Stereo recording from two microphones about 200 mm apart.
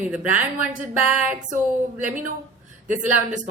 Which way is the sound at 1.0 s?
5° right (ahead or behind).